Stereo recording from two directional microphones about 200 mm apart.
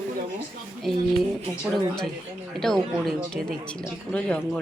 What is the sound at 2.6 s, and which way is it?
Speech, centre (ahead or behind).